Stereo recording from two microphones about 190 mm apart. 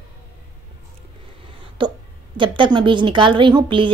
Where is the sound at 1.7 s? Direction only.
25° right (ahead or behind).